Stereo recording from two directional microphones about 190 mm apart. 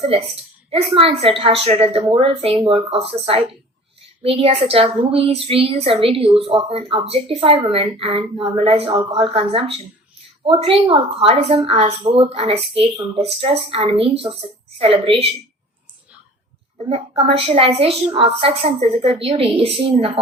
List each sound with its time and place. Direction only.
0.7 s a woman's voice: 30° right (ahead or behind)
16.7 s a woman's voice: 35° right (ahead or behind)